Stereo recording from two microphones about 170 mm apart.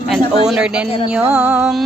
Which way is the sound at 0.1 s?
5° right (ahead or behind).